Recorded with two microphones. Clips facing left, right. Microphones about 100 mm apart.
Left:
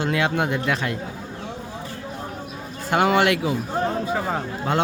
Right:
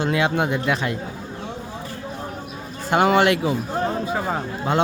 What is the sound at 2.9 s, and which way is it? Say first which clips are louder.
Speech: right 2 dB; 30° right (ahead or behind).